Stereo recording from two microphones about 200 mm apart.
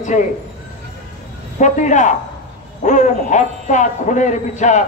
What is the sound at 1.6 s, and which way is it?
A man's voice, 40° left (ahead or behind).